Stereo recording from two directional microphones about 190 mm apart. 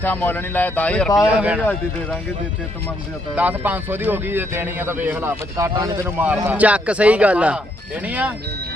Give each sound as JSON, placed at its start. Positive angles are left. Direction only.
{"t": 0.0, "sound": "speech", "side_deg": 10}
{"t": 1.4, "sound": "a man's voice", "side_deg": -10}
{"t": 3.3, "sound": "a man's voice", "side_deg": -10}